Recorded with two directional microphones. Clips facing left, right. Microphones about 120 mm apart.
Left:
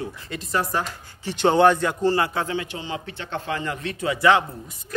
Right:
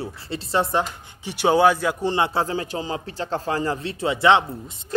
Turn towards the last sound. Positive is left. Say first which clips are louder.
# right 1 dB
turn(degrees=-25)  # may be behind; listen again after turning